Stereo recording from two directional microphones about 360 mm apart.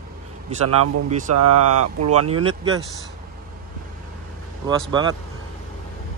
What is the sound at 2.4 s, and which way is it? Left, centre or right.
Speech, centre.